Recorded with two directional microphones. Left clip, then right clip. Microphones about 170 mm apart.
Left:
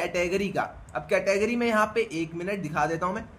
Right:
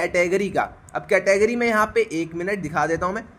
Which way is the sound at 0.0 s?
40° right (ahead or behind).